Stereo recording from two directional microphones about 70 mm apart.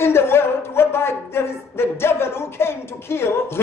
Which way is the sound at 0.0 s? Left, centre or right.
Left.